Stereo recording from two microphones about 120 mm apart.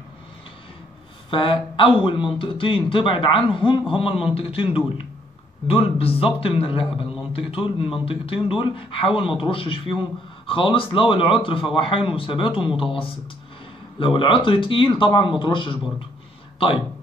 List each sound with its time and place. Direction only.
1.3 s speech: 45° left (ahead or behind)